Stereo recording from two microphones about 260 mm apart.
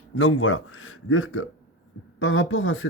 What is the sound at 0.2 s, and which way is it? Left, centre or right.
Speech, left.